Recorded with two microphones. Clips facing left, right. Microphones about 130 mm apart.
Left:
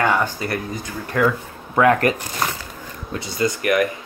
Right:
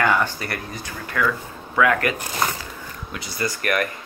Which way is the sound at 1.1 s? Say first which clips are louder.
Left 4 dB; 35° left (ahead or behind).